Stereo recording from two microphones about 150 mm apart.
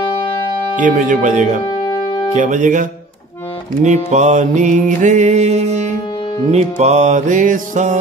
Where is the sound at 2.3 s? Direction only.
55° right (ahead or behind).